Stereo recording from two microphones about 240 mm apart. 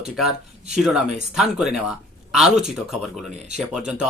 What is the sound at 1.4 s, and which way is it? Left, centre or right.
Speech, centre.